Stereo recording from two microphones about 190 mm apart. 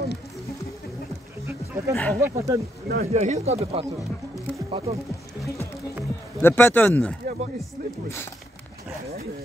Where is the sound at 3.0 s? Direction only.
35° right (ahead or behind).